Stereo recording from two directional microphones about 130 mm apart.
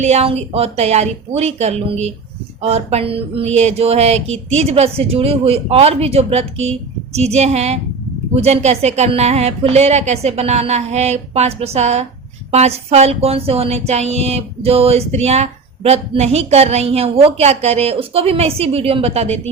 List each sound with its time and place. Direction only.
0.0 s speech: 55° right (ahead or behind)